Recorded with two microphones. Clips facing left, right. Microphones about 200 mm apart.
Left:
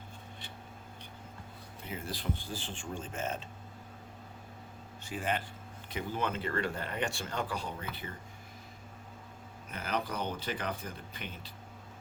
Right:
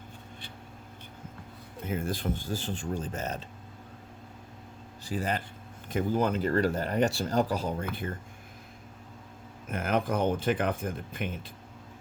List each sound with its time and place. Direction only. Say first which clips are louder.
1.9 s speech: right 7 dB; 50° right (ahead or behind)
5.0 s speech: right 3 dB; 35° right (ahead or behind)
9.6 s speech: right 7 dB; 50° right (ahead or behind)